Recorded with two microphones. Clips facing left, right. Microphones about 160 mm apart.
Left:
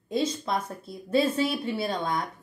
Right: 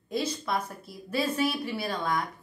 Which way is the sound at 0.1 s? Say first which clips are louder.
Left 3 dB; 25° left (ahead or behind).